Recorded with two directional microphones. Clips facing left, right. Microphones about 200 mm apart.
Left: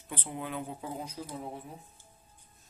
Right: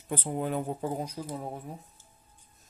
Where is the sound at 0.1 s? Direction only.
45° right (ahead or behind).